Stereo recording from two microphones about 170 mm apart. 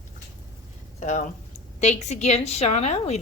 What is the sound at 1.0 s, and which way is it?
A woman's voice, 45° left (ahead or behind).